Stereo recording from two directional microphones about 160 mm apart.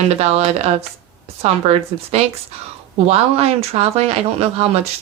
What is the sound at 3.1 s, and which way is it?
Speech, 40° right (ahead or behind).